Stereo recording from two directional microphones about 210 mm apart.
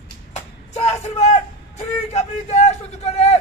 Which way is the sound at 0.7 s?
30° left (ahead or behind).